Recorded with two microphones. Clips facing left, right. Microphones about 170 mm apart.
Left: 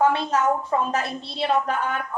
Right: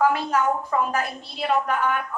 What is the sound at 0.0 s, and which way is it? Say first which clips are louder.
A woman's voice: left 1 dB; 30° left (ahead or behind).